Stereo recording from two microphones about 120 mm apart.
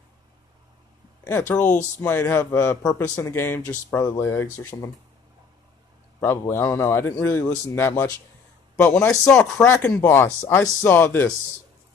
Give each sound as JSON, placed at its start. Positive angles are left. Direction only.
{"t": 1.2, "sound": "a man's voice", "side_deg": 20}
{"t": 3.9, "sound": "a man's voice", "side_deg": 30}
{"t": 6.2, "sound": "a man's voice", "side_deg": 20}
{"t": 8.7, "sound": "speech", "side_deg": 5}